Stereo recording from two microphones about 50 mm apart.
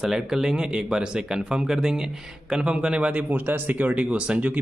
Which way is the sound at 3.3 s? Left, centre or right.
Right.